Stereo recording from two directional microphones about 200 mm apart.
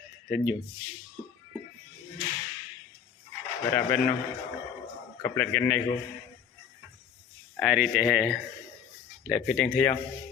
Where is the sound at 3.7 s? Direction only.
10° left (ahead or behind).